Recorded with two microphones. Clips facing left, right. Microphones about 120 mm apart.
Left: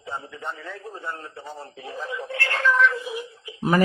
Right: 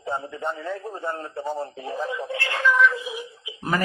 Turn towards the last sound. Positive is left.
turn(degrees=20)  # may be behind; listen again after turning